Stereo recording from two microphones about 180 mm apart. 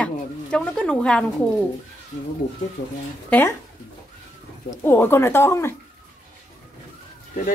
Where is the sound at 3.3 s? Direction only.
10° left (ahead or behind).